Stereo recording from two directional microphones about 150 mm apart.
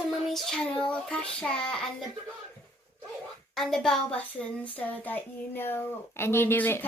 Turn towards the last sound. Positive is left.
turn(degrees=15)  # may be behind; listen again after turning